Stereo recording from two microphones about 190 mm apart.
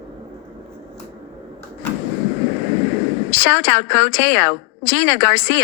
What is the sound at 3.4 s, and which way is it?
A woman's voice, 10° left (ahead or behind).